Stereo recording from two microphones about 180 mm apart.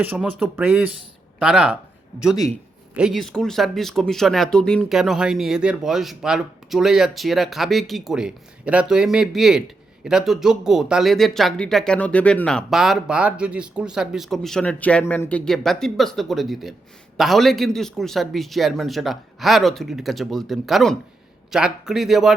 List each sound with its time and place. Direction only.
0.0 s speech: 10° right (ahead or behind)